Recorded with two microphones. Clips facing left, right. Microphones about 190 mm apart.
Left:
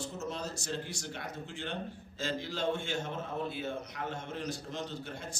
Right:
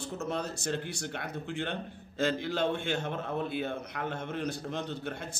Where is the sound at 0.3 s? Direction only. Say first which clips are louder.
Right 5 dB; 60° right (ahead or behind).